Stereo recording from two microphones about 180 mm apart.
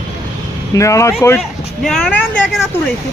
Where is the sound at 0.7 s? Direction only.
15° left (ahead or behind).